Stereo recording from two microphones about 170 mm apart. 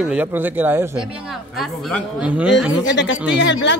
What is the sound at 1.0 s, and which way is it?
Speech, centre (ahead or behind).